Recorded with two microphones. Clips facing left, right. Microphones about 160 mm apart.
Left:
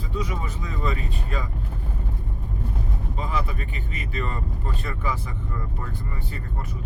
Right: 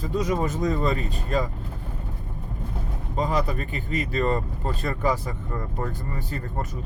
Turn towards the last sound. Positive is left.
turn(degrees=-40)  # may be behind; listen again after turning